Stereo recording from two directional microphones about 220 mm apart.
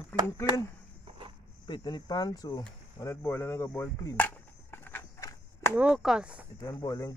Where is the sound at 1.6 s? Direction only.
20° left (ahead or behind).